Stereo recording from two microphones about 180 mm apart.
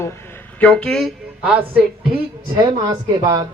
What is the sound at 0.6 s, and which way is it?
Speech, 5° left (ahead or behind).